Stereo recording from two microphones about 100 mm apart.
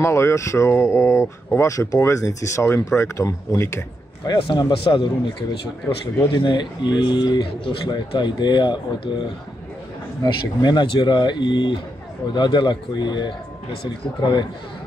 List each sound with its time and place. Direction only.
0.0 s speech: 30° left (ahead or behind)
4.4 s a man's voice: 55° left (ahead or behind)
6.3 s speech: 50° left (ahead or behind)